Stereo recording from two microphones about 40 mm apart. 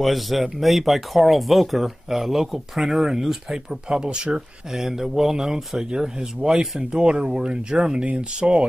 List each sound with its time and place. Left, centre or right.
0.0 s speech: centre
3.9 s speech: right
4.7 s speech: centre; by 8.6 s right